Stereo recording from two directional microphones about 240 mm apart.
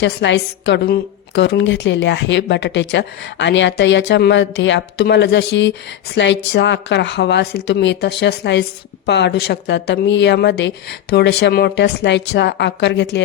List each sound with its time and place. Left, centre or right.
0.0 s speech: left